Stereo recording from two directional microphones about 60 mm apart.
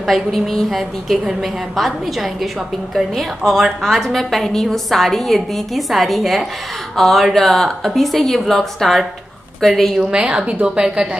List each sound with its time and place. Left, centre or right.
0.0 s a woman's voice: centre
9.9 s a woman's voice: centre